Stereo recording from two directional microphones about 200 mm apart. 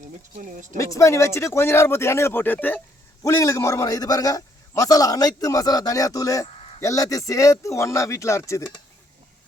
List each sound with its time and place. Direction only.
0.3 s speech: 40° right (ahead or behind)
0.8 s a man's voice: 15° left (ahead or behind)